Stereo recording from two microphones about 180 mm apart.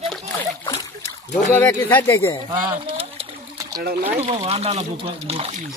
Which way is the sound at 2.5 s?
30° right (ahead or behind).